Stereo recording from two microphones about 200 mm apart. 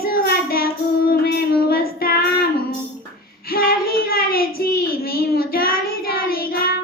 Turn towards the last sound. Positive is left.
turn(degrees=50)  # may be behind; listen again after turning